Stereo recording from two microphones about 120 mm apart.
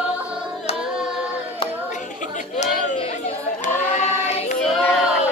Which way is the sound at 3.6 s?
80° left.